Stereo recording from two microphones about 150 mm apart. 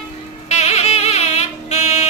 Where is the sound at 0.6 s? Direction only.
45° left (ahead or behind).